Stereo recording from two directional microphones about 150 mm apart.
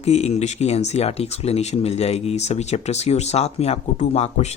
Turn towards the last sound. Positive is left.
turn(degrees=45)  # may be behind; listen again after turning